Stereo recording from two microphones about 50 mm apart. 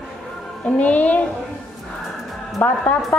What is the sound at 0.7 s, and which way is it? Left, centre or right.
Speech, left.